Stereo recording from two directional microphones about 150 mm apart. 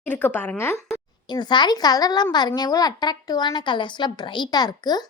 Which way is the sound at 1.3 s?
30° left (ahead or behind).